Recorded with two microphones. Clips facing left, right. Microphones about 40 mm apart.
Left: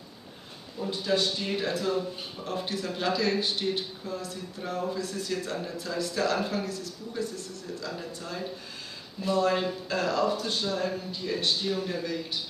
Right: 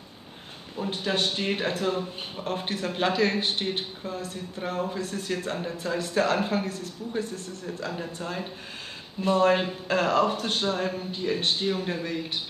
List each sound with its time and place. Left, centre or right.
0.7 s speech: right